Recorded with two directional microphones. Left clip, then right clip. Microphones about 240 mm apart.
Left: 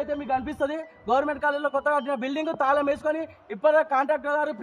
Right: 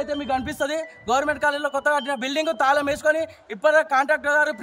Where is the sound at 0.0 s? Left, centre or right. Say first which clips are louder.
Right 2 dB; right.